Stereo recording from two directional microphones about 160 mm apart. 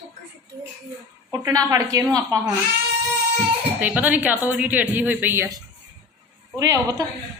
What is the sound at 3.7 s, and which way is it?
Speech, 10° right (ahead or behind).